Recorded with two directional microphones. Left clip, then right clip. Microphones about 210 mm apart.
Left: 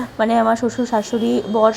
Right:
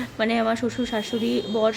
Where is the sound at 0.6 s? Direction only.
10° right (ahead or behind).